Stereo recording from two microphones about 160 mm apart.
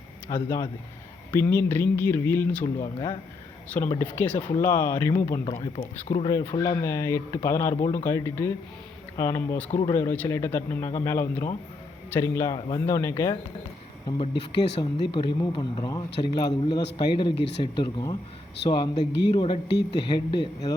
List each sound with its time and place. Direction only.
0.3 s speech: 20° left (ahead or behind)
2.8 s speech: 25° left (ahead or behind)
3.9 s speech: 10° left (ahead or behind)
5.5 s a man's voice: 40° left (ahead or behind); by 13.3 s 15° left (ahead or behind)
15.0 s a man's voice: 30° left (ahead or behind)
17.3 s speech: 90° left
17.6 s speech: 30° left (ahead or behind)
18.6 s speech: 90° left
19.3 s a man's voice: 30° left (ahead or behind)
19.6 s speech: 90° left
20.1 s speech: 30° left (ahead or behind)